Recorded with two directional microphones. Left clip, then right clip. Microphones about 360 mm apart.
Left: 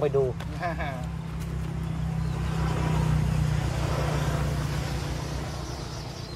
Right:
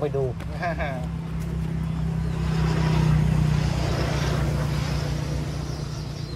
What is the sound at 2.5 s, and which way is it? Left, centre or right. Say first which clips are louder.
Vehicle: right 4 dB; right.